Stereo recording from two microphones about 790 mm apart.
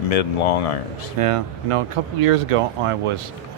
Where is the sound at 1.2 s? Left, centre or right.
Right.